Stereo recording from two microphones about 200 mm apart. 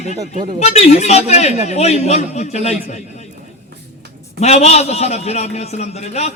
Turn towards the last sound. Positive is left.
turn(degrees=35)  # may be behind; listen again after turning